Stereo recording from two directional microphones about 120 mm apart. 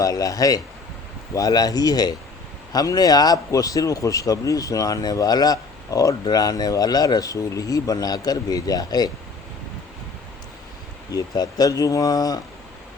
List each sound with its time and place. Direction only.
0.0 s speech: 30° left (ahead or behind)
11.1 s speech: 30° left (ahead or behind)